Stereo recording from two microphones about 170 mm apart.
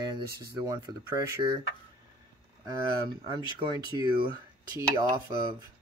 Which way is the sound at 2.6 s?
25° right (ahead or behind).